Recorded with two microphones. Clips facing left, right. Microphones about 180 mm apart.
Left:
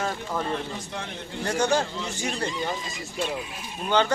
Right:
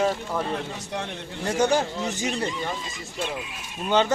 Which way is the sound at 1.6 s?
20° right (ahead or behind).